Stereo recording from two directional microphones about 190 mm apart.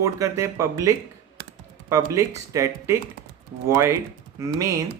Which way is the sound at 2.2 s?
15° right (ahead or behind).